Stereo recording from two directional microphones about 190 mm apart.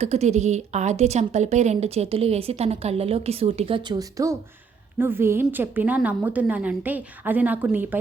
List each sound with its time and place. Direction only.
0.0 s a woman's voice: 35° right (ahead or behind); by 7.9 s 10° right (ahead or behind)